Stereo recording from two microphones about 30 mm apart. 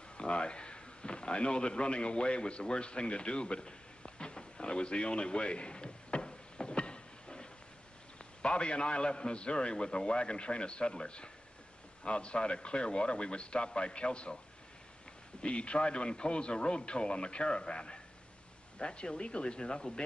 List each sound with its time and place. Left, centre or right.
0.2 s a sound: left
8.2 s a man's voice: left
15.4 s a man's voice: left